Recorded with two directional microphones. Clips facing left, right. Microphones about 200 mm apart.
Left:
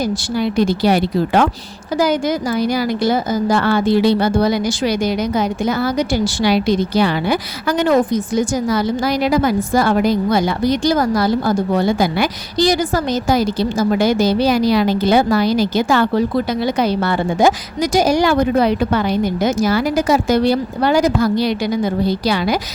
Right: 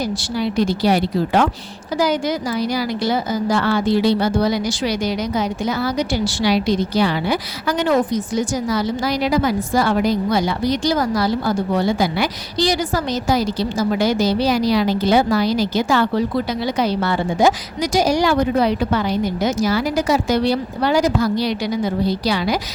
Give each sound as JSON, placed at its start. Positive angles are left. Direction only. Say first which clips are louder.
{"t": 0.5, "sound": "speech", "louder": "left 2 dB", "side_deg": 55}
{"t": 2.6, "sound": "a woman's voice", "louder": "left 3 dB", "side_deg": 50}